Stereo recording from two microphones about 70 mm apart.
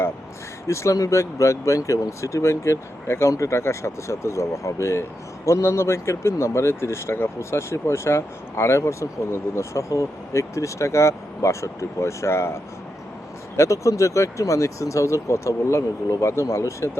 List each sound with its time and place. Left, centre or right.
0.7 s speech: left
13.6 s speech: left